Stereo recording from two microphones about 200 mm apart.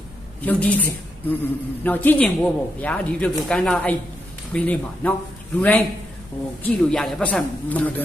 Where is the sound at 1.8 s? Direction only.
10° left (ahead or behind).